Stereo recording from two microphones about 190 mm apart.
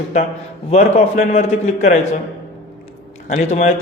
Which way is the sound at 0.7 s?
35° left (ahead or behind).